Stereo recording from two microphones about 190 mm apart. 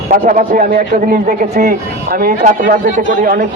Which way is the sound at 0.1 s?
45° right (ahead or behind).